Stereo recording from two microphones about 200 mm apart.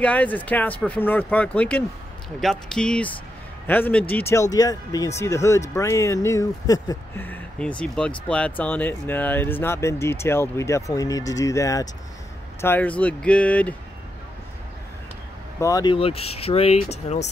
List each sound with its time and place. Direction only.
0.0 s speech: 5° left (ahead or behind)
15.6 s speech: 20° left (ahead or behind)